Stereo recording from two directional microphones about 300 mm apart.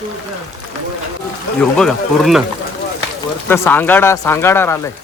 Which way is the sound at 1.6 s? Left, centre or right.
Centre.